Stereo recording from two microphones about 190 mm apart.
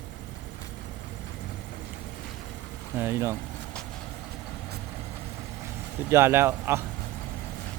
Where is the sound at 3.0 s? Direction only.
15° right (ahead or behind).